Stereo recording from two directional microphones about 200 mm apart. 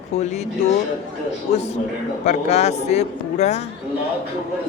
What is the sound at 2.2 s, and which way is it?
Speech, 35° left (ahead or behind).